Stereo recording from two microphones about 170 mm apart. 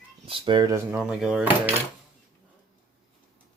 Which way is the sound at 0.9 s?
5° right (ahead or behind).